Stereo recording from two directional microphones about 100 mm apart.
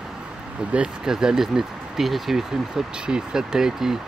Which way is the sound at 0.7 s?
10° right (ahead or behind).